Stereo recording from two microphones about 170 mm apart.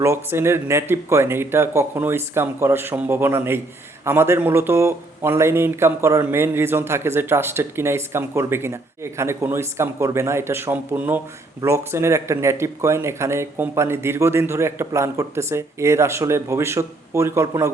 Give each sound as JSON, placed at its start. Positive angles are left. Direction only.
{"t": 0.0, "sound": "a man's voice", "side_deg": -15}